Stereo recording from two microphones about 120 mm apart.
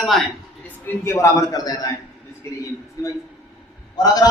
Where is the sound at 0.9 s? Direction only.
20° left (ahead or behind).